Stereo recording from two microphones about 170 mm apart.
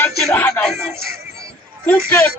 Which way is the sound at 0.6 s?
Centre (ahead or behind).